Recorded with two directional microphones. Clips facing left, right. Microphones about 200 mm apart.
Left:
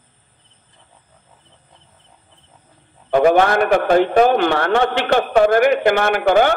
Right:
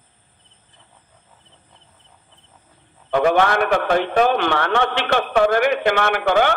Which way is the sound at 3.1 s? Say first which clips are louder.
Left 3 dB; 45° left (ahead or behind).